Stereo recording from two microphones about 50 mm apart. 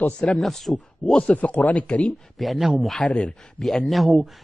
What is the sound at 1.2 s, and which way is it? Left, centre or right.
Speech, left.